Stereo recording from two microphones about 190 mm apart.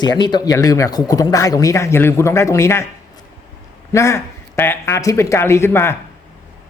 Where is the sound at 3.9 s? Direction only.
15° left (ahead or behind).